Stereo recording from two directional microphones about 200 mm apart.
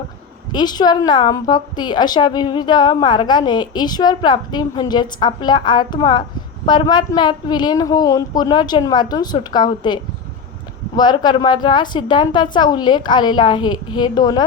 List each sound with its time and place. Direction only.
0.5 s a woman's voice: 20° left (ahead or behind)